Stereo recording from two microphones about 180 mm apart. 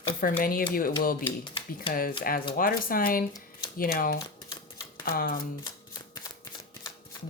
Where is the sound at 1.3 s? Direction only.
25° left (ahead or behind).